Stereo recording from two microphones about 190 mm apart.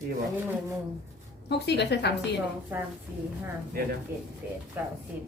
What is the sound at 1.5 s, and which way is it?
Speech, 60° left (ahead or behind).